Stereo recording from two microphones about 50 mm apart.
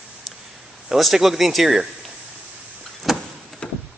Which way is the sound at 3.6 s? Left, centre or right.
Centre.